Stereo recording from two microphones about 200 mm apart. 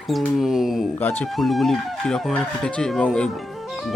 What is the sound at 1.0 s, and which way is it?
Speech, 10° left (ahead or behind).